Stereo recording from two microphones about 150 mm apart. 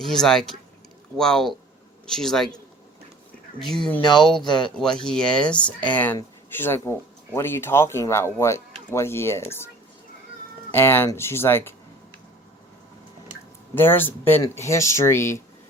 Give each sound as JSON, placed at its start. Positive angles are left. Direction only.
{"t": 0.0, "sound": "speech", "side_deg": 5}
{"t": 3.6, "sound": "speech", "side_deg": 5}
{"t": 4.4, "sound": "speech", "side_deg": 30}
{"t": 4.8, "sound": "speech", "side_deg": 5}
{"t": 10.7, "sound": "speech", "side_deg": 15}
{"t": 13.7, "sound": "speech", "side_deg": 15}